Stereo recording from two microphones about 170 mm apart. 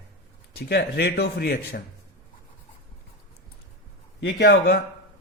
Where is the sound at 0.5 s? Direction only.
75° left (ahead or behind).